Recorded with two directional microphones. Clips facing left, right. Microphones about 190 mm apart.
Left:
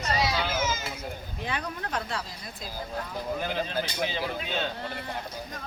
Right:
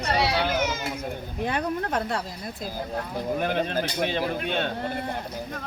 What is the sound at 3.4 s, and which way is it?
Speech, 60° right (ahead or behind).